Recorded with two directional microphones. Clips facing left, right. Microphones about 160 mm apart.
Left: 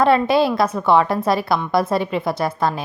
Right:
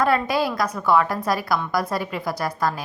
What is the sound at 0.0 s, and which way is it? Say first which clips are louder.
A woman's voice: left 5 dB; 25° left (ahead or behind).